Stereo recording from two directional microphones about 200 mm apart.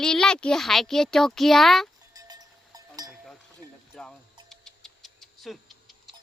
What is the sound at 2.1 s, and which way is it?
Sheep, 20° right (ahead or behind).